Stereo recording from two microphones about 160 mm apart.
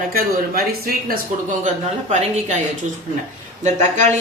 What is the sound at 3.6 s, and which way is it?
Speech, 45° right (ahead or behind).